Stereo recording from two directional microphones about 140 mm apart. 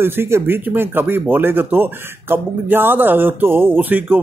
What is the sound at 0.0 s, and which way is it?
Speech, 15° right (ahead or behind).